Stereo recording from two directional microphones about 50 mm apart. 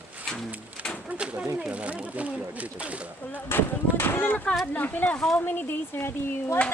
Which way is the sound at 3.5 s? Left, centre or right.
Left.